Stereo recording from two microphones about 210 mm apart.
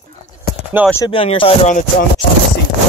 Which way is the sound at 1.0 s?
25° left (ahead or behind).